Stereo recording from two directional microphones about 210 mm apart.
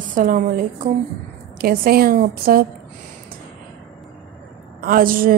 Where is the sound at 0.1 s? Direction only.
40° right (ahead or behind).